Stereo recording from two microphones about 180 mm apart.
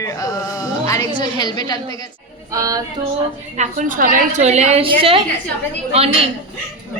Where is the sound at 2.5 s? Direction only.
20° right (ahead or behind).